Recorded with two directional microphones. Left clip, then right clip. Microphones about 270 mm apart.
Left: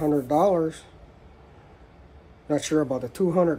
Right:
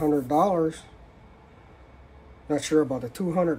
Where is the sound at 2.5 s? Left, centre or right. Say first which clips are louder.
Even; centre.